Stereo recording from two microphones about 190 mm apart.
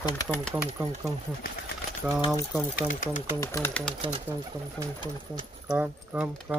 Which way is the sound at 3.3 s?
15° left (ahead or behind).